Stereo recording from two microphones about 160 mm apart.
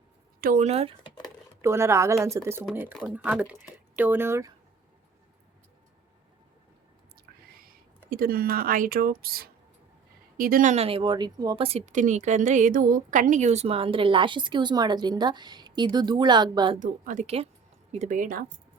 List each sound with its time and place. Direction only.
0.4 s a woman's voice: 50° right (ahead or behind)
1.6 s speech: 15° right (ahead or behind)
7.3 s a sound: 75° right (ahead or behind)
8.1 s a woman's voice: 70° right (ahead or behind); by 11.8 s 35° right (ahead or behind)
11.9 s a woman's voice: 50° right (ahead or behind); by 16.7 s 25° right (ahead or behind)
16.8 s a woman's voice: 50° right (ahead or behind)